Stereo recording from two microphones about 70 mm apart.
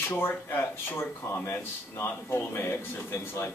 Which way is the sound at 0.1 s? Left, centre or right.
Left.